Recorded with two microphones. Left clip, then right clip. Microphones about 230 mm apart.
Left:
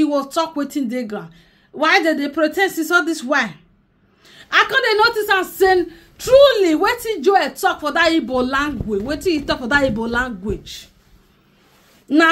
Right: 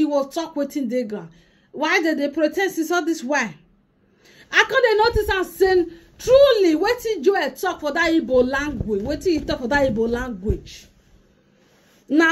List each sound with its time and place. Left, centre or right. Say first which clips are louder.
0.0 s a woman's voice: left 3 dB; centre